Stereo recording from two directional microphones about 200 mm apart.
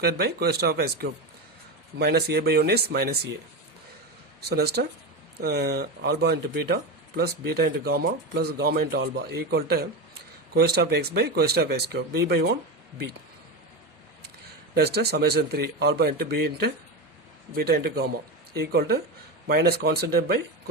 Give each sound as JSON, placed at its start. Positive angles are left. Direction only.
{"t": 0.0, "sound": "speech", "side_deg": -50}
{"t": 4.4, "sound": "speech", "side_deg": -50}
{"t": 14.2, "sound": "speech", "side_deg": -55}